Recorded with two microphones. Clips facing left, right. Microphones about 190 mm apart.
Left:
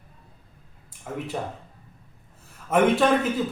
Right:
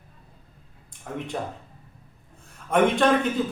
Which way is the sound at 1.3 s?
5° left (ahead or behind).